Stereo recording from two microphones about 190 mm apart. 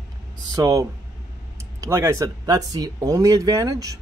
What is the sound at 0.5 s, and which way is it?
Speech, 15° right (ahead or behind).